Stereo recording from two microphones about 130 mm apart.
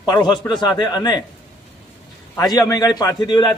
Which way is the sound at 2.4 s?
25° left (ahead or behind).